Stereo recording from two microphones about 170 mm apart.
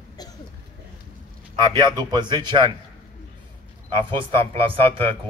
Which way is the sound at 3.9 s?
30° right (ahead or behind).